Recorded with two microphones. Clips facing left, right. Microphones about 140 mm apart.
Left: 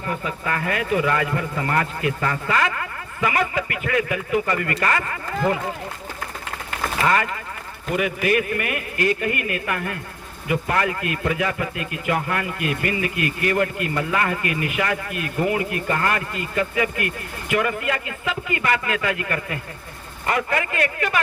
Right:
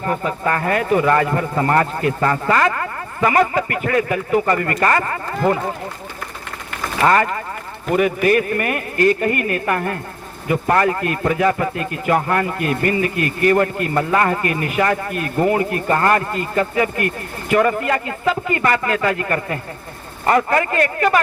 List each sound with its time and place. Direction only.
0.0 s speech: 45° right (ahead or behind)
7.0 s speech: 40° right (ahead or behind)